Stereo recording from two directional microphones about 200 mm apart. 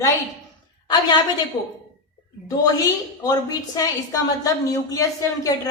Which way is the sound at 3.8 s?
15° left (ahead or behind).